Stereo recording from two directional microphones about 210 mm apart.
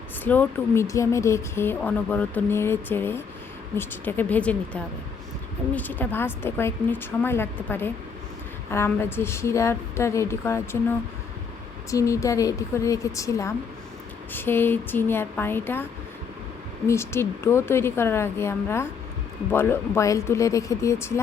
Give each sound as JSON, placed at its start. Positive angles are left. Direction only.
{"t": 0.3, "sound": "speech", "side_deg": 10}
{"t": 11.9, "sound": "speech", "side_deg": 15}